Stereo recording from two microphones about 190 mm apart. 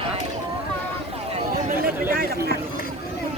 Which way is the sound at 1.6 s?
50° right (ahead or behind).